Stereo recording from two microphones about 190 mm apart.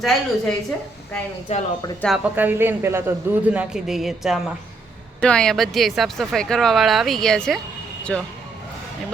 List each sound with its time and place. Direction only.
0.0 s speech: centre (ahead or behind)
1.5 s speech: 35° left (ahead or behind)
2.0 s speech: centre (ahead or behind)
2.3 s a man's voice: 10° right (ahead or behind)